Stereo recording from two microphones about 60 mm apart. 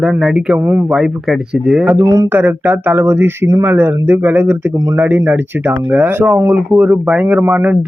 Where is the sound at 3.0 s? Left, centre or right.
Right.